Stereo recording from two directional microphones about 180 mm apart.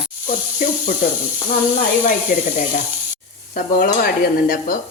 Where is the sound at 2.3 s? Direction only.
55° left (ahead or behind).